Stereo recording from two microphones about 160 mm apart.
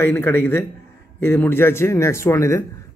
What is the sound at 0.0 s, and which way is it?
A man's voice, 15° left (ahead or behind).